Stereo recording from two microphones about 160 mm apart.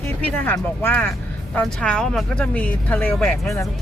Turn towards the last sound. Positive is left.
turn(degrees=10)  # may be behind; listen again after turning